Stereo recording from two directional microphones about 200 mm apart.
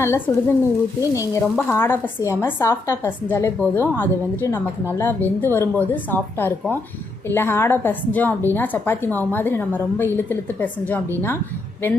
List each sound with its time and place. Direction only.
0.0 s a woman's voice: 15° left (ahead or behind)